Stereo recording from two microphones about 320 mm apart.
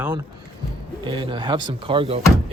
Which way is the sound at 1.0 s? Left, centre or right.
Centre.